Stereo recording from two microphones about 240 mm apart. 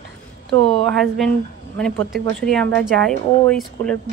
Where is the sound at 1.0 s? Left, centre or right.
Centre.